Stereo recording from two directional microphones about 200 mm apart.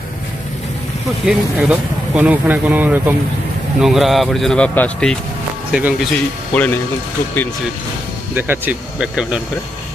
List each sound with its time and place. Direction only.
1.2 s a man's voice: 5° right (ahead or behind)
5.7 s speech: 5° right (ahead or behind)
6.5 s speech: 10° left (ahead or behind)
8.4 s a man's voice: 10° right (ahead or behind)